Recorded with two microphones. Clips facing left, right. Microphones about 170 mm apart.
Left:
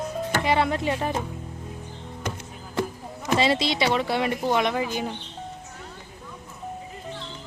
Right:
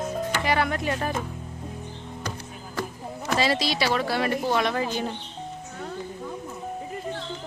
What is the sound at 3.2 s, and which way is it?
A woman's voice, 20° left (ahead or behind).